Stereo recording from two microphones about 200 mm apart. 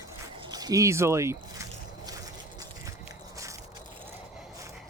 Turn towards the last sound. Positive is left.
turn(degrees=-15)  # may be behind; listen again after turning